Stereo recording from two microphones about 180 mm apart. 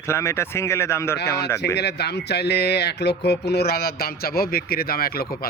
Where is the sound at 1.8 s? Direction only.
65° left (ahead or behind).